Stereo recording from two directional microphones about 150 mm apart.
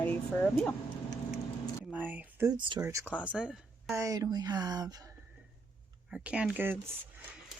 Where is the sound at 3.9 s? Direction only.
20° right (ahead or behind).